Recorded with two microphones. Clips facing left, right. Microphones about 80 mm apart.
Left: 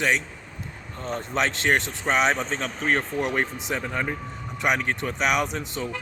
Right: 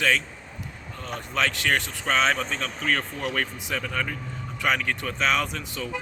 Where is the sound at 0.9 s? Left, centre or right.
Left.